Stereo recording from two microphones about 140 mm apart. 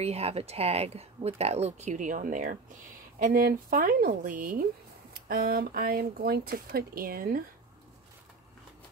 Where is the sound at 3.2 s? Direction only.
90° right.